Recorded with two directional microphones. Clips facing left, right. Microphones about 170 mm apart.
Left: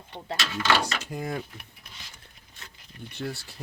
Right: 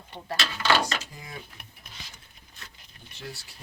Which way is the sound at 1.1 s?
60° left (ahead or behind).